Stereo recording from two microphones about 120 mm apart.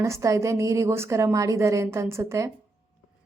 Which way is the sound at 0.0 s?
25° right (ahead or behind).